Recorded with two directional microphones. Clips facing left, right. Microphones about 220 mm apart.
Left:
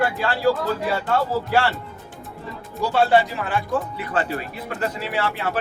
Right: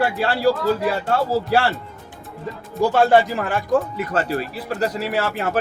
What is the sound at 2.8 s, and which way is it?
Speech, 45° right (ahead or behind).